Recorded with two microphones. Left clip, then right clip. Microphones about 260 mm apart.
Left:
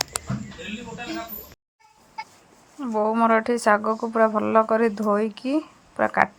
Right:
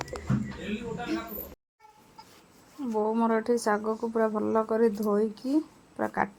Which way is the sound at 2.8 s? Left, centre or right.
Left.